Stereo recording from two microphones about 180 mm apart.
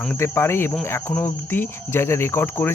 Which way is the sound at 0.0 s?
10° left (ahead or behind).